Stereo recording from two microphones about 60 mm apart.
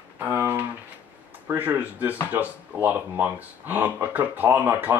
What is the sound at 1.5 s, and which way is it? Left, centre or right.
Speech, right.